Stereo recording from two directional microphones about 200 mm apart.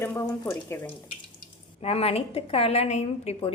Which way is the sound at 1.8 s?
30° left (ahead or behind).